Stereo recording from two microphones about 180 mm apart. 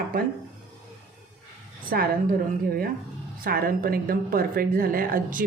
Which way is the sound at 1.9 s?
55° right (ahead or behind).